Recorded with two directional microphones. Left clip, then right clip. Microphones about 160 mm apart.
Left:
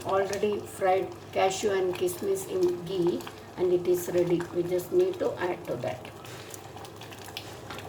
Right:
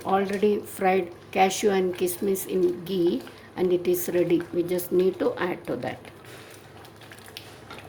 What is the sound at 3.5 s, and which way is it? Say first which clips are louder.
Speech: right 2 dB; 60° right (ahead or behind).